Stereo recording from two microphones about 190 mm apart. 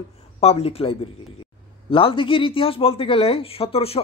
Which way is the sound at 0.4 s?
30° left (ahead or behind).